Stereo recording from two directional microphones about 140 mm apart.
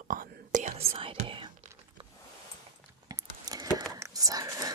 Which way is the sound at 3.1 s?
25° right (ahead or behind).